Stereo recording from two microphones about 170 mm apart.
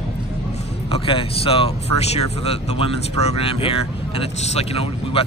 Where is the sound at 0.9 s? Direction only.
35° left (ahead or behind).